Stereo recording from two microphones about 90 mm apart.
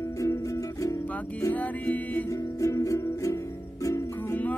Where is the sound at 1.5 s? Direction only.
20° left (ahead or behind).